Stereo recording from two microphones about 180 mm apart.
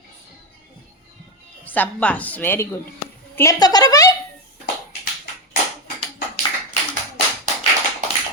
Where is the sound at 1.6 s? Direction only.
10° left (ahead or behind).